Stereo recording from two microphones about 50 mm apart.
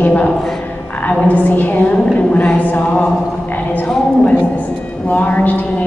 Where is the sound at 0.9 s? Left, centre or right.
Left.